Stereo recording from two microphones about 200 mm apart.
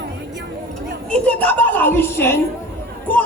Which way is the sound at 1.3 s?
10° left (ahead or behind).